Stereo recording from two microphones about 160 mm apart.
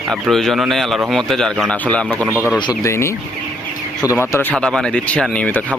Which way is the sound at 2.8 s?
15° left (ahead or behind).